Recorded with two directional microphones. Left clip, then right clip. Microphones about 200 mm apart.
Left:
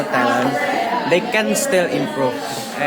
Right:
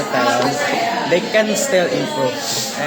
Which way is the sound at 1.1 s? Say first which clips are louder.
Right 2 dB; 25° left (ahead or behind).